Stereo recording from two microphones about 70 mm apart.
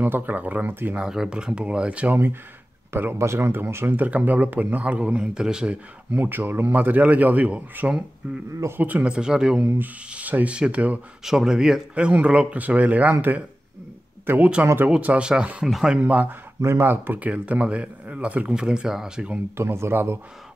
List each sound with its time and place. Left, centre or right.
0.0 s speech: right
1.0 s speech: centre
2.9 s speech: right; by 5.8 s centre
6.1 s speech: right; by 9.7 s centre
9.8 s speech: right
11.2 s speech: centre
16.0 s speech: right
19.5 s speech: right